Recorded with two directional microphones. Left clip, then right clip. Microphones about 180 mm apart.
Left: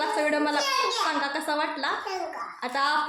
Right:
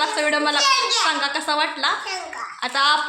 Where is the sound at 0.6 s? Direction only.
25° left (ahead or behind).